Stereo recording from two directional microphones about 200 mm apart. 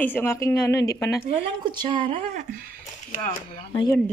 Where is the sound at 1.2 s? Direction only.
30° right (ahead or behind).